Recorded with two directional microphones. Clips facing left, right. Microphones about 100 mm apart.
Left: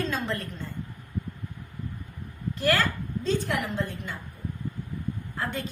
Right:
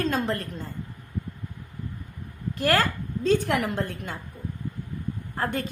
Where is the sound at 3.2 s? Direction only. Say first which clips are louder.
Right 5 dB; 55° right (ahead or behind).